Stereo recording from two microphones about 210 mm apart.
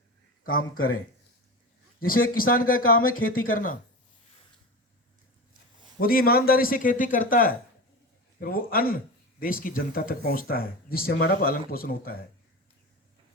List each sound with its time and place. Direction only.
2.0 s speech: 45° left (ahead or behind)
6.0 s speech: 45° left (ahead or behind)